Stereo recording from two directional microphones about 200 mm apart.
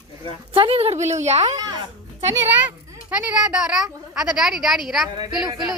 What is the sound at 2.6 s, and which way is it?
A child's voice, 5° right (ahead or behind).